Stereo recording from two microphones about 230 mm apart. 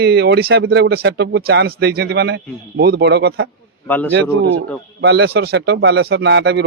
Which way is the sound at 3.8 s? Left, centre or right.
Centre.